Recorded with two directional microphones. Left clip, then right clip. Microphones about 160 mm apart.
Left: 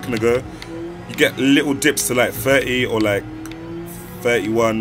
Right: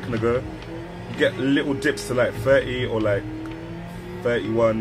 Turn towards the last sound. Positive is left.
turn(degrees=35)  # may be behind; listen again after turning